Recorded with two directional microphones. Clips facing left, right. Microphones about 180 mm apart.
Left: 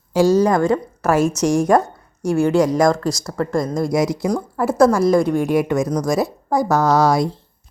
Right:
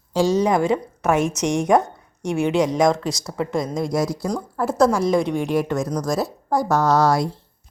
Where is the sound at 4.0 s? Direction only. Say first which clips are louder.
Left 4 dB; 15° left (ahead or behind).